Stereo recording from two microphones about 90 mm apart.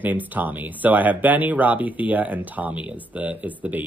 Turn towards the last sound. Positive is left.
turn(degrees=-15)  # may be behind; listen again after turning